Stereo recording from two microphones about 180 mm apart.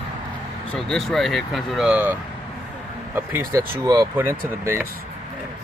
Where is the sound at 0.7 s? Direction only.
Centre (ahead or behind); by 4.4 s 15° right (ahead or behind).